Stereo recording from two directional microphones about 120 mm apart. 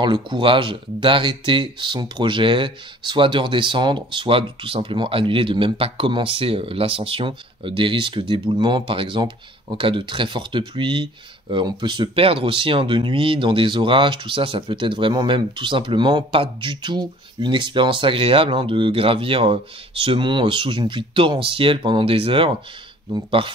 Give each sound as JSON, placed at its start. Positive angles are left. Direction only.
{"t": 0.0, "sound": "speech", "side_deg": -40}